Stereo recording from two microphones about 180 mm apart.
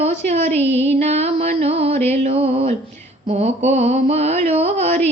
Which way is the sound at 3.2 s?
35° right (ahead or behind).